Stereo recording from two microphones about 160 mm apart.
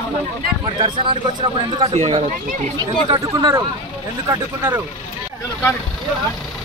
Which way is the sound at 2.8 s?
25° right (ahead or behind).